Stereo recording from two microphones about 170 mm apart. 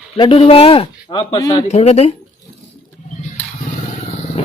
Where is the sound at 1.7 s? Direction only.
35° left (ahead or behind).